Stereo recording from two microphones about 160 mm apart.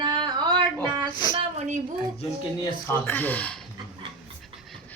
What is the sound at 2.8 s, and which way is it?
Speech, 10° left (ahead or behind).